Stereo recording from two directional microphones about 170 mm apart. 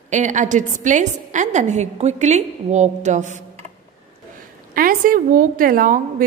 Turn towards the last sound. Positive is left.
turn(degrees=-55)  # may be behind; listen again after turning